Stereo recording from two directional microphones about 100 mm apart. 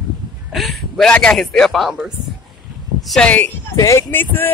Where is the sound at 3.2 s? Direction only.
15° left (ahead or behind).